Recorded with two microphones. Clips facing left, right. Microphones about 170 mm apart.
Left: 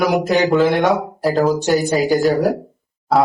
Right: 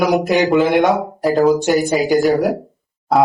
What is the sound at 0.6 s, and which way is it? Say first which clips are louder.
Speech: right 1 dB; 20° right (ahead or behind).